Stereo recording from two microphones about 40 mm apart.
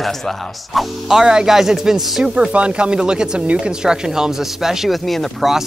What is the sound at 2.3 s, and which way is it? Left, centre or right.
Speech, right.